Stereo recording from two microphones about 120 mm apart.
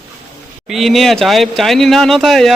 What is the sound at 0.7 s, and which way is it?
A man's voice, centre (ahead or behind).